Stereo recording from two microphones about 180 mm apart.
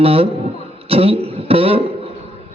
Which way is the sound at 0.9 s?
30° right (ahead or behind).